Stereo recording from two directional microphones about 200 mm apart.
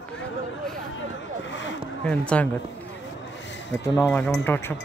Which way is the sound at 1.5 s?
65° left (ahead or behind).